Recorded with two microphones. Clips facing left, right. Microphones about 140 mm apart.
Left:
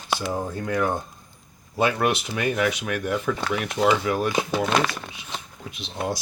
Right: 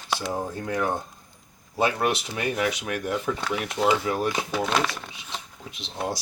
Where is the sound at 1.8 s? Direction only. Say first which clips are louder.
Left 2 dB; 35° right (ahead or behind).